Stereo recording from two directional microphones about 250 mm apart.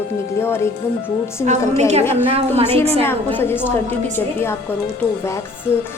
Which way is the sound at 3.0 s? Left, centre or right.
Centre.